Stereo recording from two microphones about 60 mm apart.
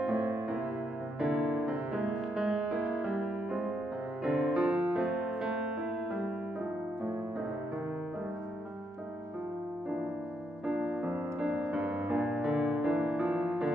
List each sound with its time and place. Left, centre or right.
0.0 s music: centre
10.7 s music: centre
11.5 s music: right